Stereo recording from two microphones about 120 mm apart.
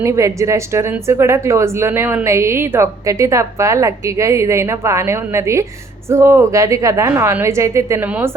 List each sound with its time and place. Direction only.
0.0 s speech: 25° right (ahead or behind)